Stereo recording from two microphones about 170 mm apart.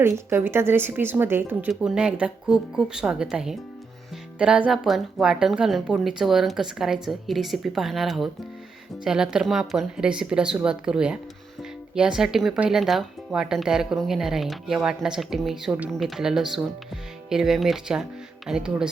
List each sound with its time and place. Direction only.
0.0 s speech: 15° right (ahead or behind)